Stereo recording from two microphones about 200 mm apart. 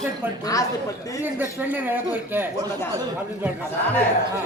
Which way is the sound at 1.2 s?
10° right (ahead or behind).